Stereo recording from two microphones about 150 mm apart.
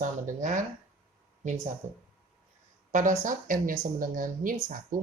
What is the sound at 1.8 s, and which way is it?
Speech, 50° right (ahead or behind).